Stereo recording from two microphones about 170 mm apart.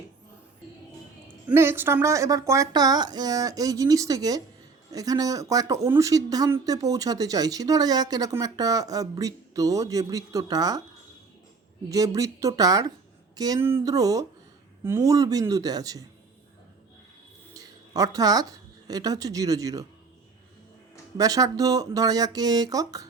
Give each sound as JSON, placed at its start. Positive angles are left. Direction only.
{"t": 1.5, "sound": "speech", "side_deg": -15}
{"t": 11.9, "sound": "speech", "side_deg": -20}
{"t": 17.5, "sound": "speech", "side_deg": -20}
{"t": 21.2, "sound": "speech", "side_deg": -20}